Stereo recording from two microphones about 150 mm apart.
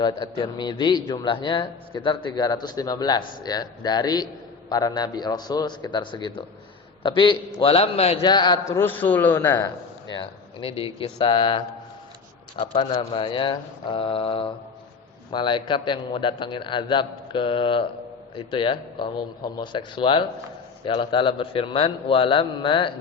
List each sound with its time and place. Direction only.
0.0 s a man's voice: 30° left (ahead or behind)
8.2 s a man's voice: 30° left (ahead or behind)
10.1 s a man's voice: 35° left (ahead or behind)